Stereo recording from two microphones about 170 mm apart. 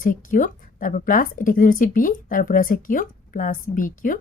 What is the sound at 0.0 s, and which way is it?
A woman's voice, 50° left (ahead or behind).